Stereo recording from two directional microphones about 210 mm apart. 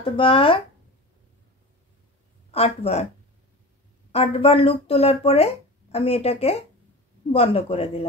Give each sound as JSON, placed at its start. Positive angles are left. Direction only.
{"t": 0.0, "sound": "speech", "side_deg": 25}
{"t": 2.5, "sound": "speech", "side_deg": 30}
{"t": 4.1, "sound": "speech", "side_deg": 25}